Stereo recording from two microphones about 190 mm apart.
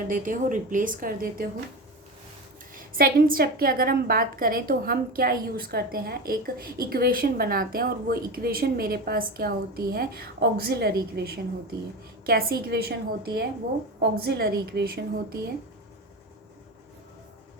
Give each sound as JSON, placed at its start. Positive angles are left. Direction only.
{"t": 0.1, "sound": "a woman's voice", "side_deg": -45}
{"t": 2.7, "sound": "a woman's voice", "side_deg": -50}